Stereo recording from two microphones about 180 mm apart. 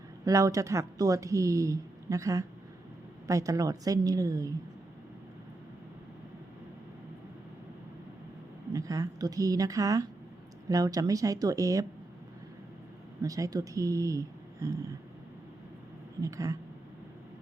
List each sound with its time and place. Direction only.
0.3 s speech: 20° right (ahead or behind)
8.7 s speech: 20° right (ahead or behind)
13.2 s speech: 20° right (ahead or behind)
16.2 s speech: 20° right (ahead or behind)